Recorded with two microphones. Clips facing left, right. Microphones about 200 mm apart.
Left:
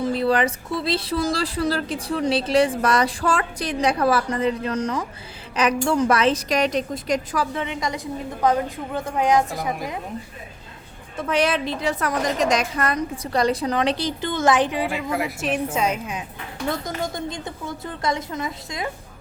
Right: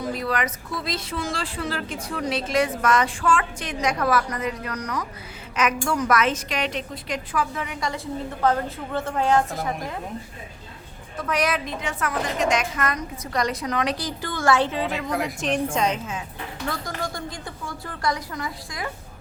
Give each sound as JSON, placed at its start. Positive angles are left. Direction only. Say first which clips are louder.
{"t": 0.0, "sound": "speech", "louder": "left 6 dB", "side_deg": 30}
{"t": 7.5, "sound": "a woman's voice", "louder": "left 3 dB", "side_deg": 25}
{"t": 11.2, "sound": "a woman's voice", "louder": "left 3 dB", "side_deg": 25}